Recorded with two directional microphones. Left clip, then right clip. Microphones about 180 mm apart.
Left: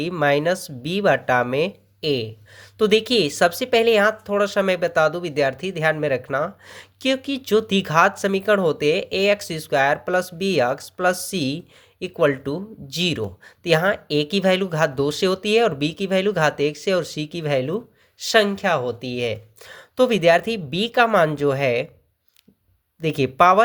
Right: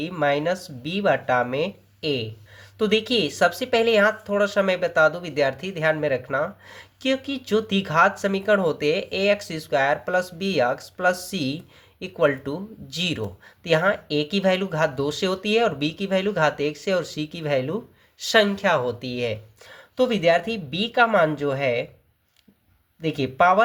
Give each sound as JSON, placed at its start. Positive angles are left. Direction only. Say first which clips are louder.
{"t": 0.0, "sound": "speech", "louder": "left 3 dB", "side_deg": 35}
{"t": 19.6, "sound": "speech", "louder": "left 4 dB", "side_deg": 40}
{"t": 23.0, "sound": "speech", "louder": "left 3 dB", "side_deg": 35}